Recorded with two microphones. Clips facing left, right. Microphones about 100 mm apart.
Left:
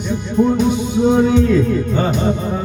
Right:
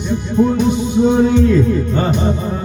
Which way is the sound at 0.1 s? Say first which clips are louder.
Right 1 dB; centre (ahead or behind).